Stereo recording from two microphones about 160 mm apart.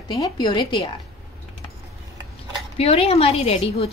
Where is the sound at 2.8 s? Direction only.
40° left (ahead or behind).